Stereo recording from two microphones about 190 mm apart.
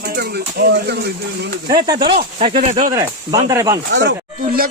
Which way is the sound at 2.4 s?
30° right (ahead or behind).